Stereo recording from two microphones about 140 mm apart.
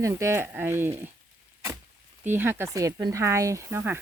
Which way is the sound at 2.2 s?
15° right (ahead or behind).